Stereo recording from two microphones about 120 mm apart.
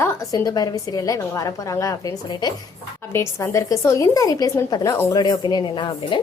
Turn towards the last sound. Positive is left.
turn(degrees=40)  # may be behind; listen again after turning